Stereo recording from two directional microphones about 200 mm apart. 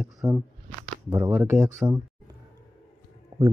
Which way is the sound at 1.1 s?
15° right (ahead or behind).